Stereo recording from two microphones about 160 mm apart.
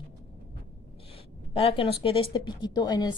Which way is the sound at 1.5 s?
35° left (ahead or behind).